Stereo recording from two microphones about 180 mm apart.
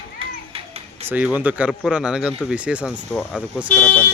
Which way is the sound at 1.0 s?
10° right (ahead or behind).